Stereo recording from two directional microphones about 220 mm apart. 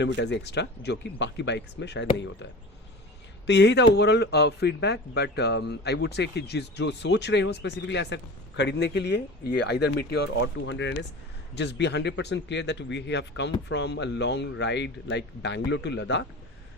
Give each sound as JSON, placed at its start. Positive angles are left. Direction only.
{"t": 0.0, "sound": "speech", "side_deg": 50}
{"t": 3.4, "sound": "speech", "side_deg": 50}